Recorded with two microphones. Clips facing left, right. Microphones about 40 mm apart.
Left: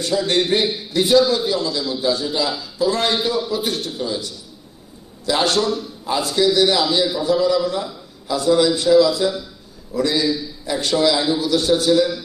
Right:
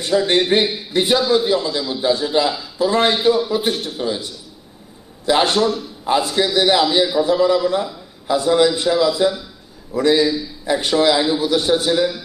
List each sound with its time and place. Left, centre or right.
0.0 s a man's voice: right